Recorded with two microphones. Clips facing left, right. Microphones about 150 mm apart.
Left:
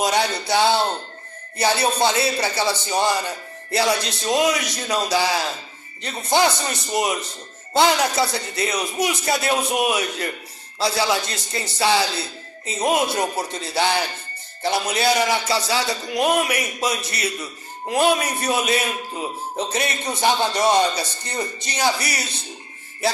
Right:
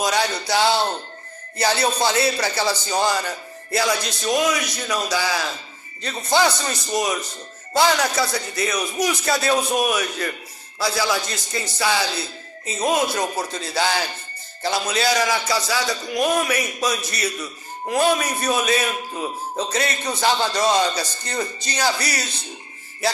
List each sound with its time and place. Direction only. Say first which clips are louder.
0.0 s a man's voice: left 1 dB; 25° left (ahead or behind)